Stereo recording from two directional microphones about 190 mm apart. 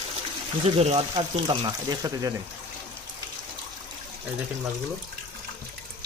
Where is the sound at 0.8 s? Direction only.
35° right (ahead or behind).